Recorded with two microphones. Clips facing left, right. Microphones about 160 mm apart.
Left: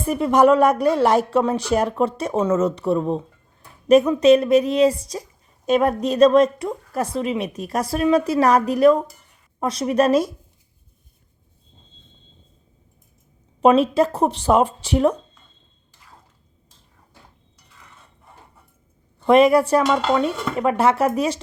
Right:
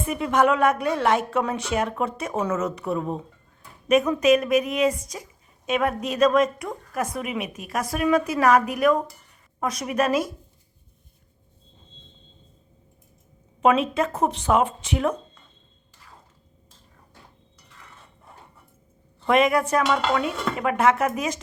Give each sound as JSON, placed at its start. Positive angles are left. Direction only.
{"t": 0.0, "sound": "a woman's voice", "side_deg": 35}
{"t": 13.6, "sound": "a woman's voice", "side_deg": 35}
{"t": 19.3, "sound": "a woman's voice", "side_deg": 30}